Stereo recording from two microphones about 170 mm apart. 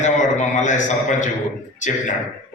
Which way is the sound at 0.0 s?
45° left (ahead or behind).